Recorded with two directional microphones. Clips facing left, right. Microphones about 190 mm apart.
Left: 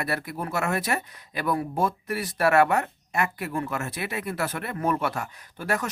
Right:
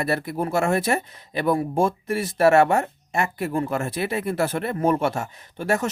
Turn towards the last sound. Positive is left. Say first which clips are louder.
# right 5 dB
turn(degrees=-25)  # may be behind; listen again after turning